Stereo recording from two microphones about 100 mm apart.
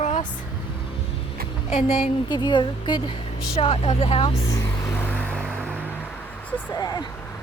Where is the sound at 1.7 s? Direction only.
80° left.